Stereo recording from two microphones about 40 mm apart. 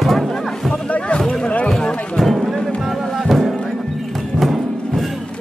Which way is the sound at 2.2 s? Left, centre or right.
Centre.